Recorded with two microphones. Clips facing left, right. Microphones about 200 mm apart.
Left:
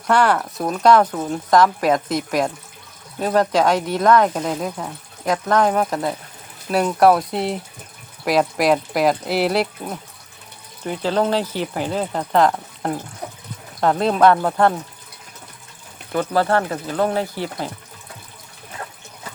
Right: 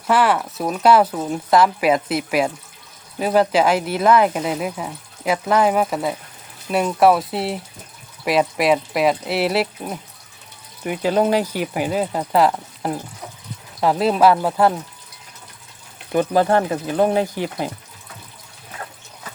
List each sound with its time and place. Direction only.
0.1 s speech: 5° right (ahead or behind)
16.1 s speech: 15° right (ahead or behind)